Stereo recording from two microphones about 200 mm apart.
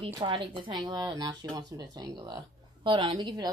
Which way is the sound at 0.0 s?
25° right (ahead or behind).